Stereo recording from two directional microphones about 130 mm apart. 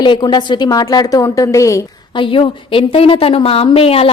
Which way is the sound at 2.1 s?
40° left (ahead or behind).